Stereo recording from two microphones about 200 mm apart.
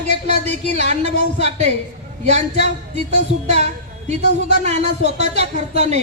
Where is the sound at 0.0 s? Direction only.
35° right (ahead or behind).